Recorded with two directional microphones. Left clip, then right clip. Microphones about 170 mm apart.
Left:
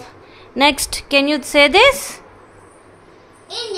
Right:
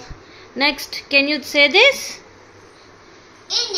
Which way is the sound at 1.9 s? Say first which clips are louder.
Left 2 dB; 90° left.